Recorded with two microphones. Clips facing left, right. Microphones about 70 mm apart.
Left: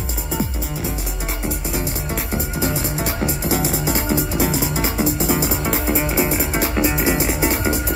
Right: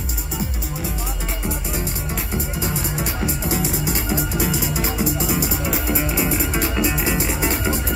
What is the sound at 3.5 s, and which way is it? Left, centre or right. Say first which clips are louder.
Music: left 4 dB; left.